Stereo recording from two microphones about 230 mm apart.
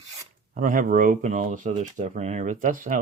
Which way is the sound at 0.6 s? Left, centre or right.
Right.